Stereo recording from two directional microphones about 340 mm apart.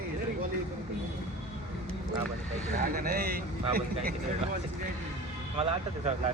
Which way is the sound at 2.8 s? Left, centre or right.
Right.